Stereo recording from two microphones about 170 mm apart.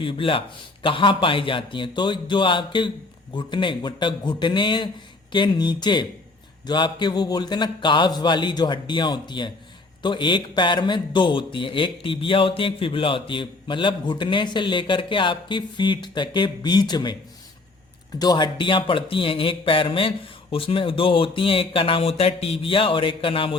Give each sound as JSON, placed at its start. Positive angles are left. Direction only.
{"t": 0.0, "sound": "speech", "side_deg": 30}
{"t": 18.2, "sound": "speech", "side_deg": 25}